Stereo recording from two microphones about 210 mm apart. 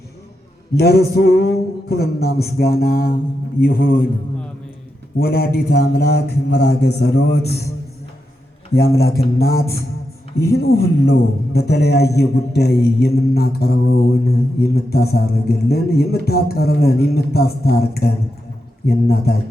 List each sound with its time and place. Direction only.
0.8 s mantra: 50° left (ahead or behind)
5.1 s mantra: 45° left (ahead or behind)
8.7 s mantra: 50° left (ahead or behind)